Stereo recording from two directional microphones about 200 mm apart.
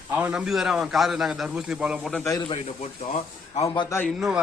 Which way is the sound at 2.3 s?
20° left (ahead or behind).